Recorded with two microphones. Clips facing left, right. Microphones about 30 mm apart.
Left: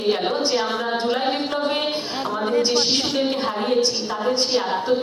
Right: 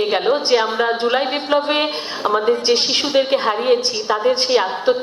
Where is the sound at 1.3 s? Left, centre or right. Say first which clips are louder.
Right 4 dB; right.